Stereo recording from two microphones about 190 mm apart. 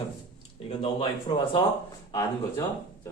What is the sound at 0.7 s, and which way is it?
Speech, 30° left (ahead or behind).